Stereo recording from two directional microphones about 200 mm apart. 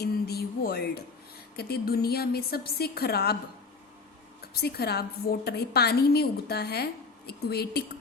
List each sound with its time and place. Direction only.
0.0 s a sound: 50° left (ahead or behind)
1.5 s a woman's voice: 50° left (ahead or behind)
4.5 s a woman's voice: 55° left (ahead or behind)